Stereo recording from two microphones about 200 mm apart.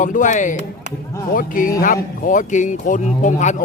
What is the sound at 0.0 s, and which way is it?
Speech, 40° left (ahead or behind).